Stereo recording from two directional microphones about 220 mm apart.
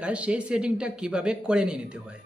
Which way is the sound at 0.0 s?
5° right (ahead or behind).